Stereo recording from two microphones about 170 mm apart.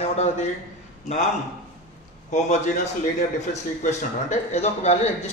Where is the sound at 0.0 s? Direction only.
40° left (ahead or behind).